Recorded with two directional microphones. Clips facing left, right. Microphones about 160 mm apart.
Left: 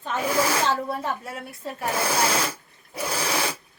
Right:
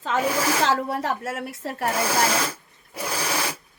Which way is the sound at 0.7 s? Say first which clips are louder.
Right 2 dB; 85° right.